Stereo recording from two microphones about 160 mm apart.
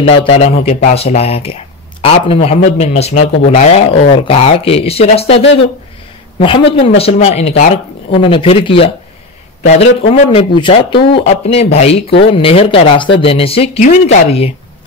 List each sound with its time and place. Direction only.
0.0 s speech: 35° left (ahead or behind)
11.2 s speech: 40° left (ahead or behind)